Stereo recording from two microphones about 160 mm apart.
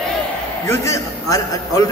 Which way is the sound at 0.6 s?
15° left (ahead or behind).